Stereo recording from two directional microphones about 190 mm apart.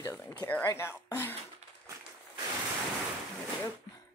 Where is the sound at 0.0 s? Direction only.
15° left (ahead or behind).